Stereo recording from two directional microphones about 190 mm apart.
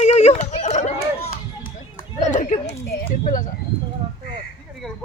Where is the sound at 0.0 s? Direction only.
35° left (ahead or behind).